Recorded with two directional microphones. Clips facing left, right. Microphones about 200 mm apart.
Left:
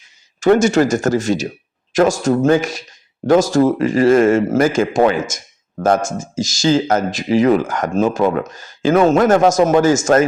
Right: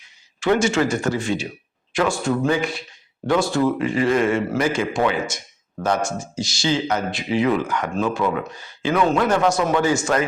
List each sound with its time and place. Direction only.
0.3 s speech: 45° left (ahead or behind)
6.0 s speech: 90° left
6.4 s speech: 45° left (ahead or behind)